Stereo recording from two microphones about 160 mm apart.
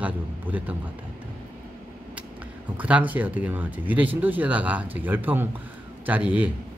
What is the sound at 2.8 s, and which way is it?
Speech, 10° right (ahead or behind).